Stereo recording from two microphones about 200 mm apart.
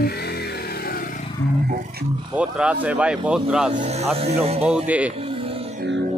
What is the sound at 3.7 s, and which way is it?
Speech, 35° right (ahead or behind).